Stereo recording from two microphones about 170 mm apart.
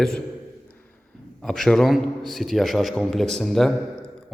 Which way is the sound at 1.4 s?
Centre (ahead or behind).